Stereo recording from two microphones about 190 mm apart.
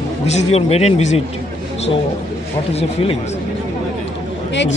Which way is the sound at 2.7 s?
30° left (ahead or behind).